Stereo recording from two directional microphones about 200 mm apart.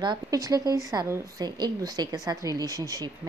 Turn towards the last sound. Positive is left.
turn(degrees=-15)  # may be behind; listen again after turning